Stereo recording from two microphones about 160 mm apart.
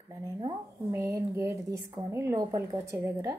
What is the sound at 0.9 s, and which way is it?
A woman's voice, 20° right (ahead or behind).